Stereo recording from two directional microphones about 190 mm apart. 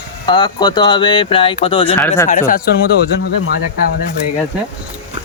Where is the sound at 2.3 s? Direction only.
45° left (ahead or behind).